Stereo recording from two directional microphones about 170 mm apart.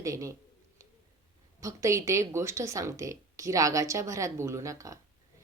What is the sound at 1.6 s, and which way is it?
A woman's voice, 20° right (ahead or behind).